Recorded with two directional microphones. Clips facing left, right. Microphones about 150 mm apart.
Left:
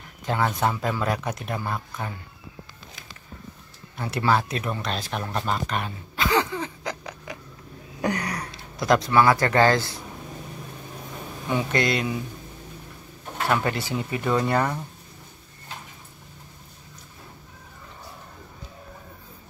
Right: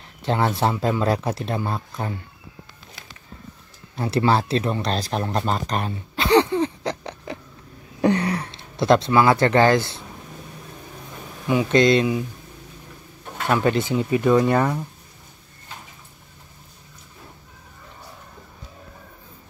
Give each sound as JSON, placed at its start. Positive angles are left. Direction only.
{"t": 0.2, "sound": "speech", "side_deg": -30}
{"t": 3.9, "sound": "speech", "side_deg": -30}
{"t": 11.4, "sound": "speech", "side_deg": -20}
{"t": 13.5, "sound": "speech", "side_deg": -20}